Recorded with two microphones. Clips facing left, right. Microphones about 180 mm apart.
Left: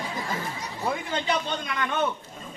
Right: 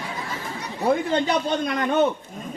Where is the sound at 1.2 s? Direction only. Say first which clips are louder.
Right 5 dB; 40° right (ahead or behind).